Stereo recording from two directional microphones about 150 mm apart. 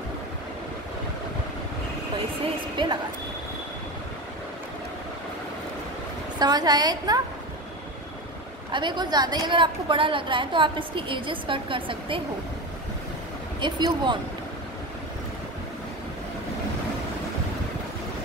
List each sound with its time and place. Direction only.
2.8 s a woman's voice: 30° right (ahead or behind)
6.4 s a woman's voice: 25° right (ahead or behind)
8.7 s a woman's voice: 30° right (ahead or behind)
13.6 s a woman's voice: 30° right (ahead or behind)